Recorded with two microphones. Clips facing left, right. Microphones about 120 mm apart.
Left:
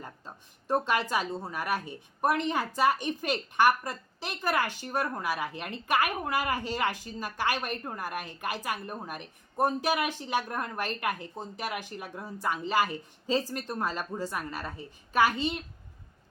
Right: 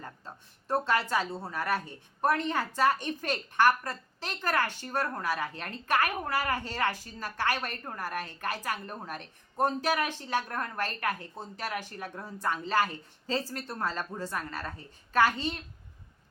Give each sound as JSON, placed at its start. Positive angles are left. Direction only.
{"t": 0.0, "sound": "speech", "side_deg": 15}